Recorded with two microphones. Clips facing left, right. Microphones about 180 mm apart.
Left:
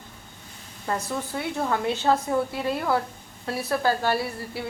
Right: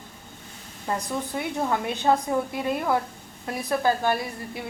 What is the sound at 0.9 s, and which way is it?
A woman's voice, 15° right (ahead or behind).